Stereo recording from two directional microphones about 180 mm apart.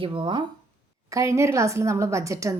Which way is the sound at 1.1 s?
15° right (ahead or behind).